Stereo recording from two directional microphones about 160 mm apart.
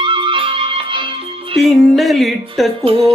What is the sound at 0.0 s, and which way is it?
Music, 30° right (ahead or behind).